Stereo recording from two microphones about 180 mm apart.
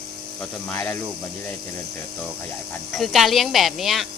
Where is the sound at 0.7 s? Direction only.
10° left (ahead or behind).